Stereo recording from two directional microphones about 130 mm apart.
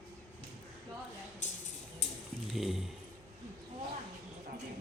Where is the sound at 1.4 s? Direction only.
70° left (ahead or behind).